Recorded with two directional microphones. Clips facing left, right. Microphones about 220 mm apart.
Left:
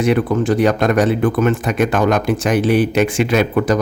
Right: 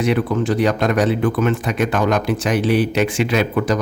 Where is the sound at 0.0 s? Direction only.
50° left (ahead or behind).